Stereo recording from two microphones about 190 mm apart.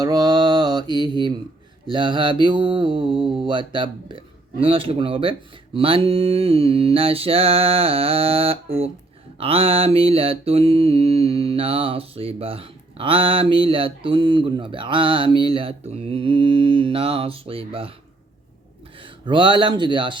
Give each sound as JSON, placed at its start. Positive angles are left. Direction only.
{"t": 0.0, "sound": "mantra", "side_deg": -20}
{"t": 19.2, "sound": "mantra", "side_deg": -25}